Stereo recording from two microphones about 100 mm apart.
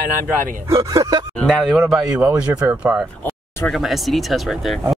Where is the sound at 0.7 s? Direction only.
30° right (ahead or behind).